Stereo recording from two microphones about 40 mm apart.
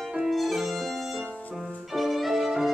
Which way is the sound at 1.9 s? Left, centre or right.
Centre.